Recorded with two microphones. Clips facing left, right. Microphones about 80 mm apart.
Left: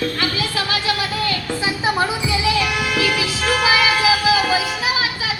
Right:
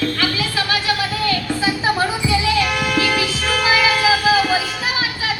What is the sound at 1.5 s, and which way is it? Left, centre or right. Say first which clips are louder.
Music: right 2 dB; left.